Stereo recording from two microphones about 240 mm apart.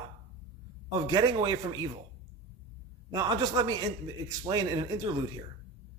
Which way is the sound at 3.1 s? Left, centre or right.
Centre.